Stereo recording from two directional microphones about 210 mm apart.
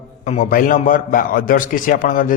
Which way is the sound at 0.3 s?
35° left (ahead or behind).